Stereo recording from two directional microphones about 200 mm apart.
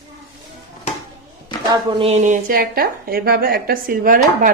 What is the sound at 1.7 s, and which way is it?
Speech, 25° right (ahead or behind).